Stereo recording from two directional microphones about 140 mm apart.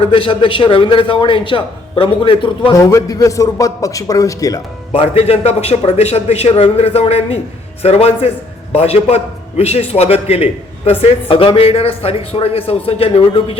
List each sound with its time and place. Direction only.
0.0 s a man's voice: 40° left (ahead or behind)
2.7 s a man's voice: 25° left (ahead or behind)
4.9 s a man's voice: 45° left (ahead or behind)